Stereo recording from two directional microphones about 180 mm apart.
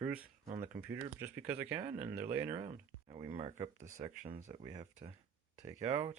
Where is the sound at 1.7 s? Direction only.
30° right (ahead or behind).